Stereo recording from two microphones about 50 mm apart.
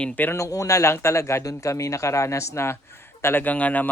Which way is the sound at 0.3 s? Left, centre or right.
Left.